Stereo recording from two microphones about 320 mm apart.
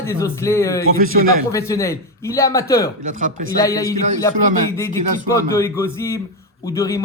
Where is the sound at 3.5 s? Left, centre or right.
Centre.